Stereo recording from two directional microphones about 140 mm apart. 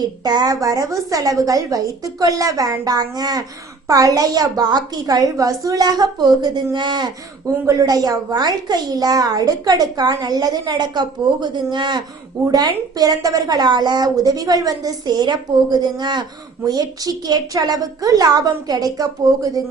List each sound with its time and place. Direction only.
0.0 s a woman's voice: 30° right (ahead or behind)